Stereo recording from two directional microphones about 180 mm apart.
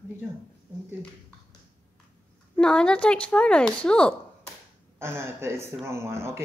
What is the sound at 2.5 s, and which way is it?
Speech, 5° left (ahead or behind).